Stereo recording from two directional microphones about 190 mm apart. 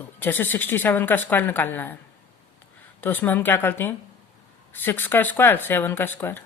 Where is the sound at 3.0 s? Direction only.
10° left (ahead or behind).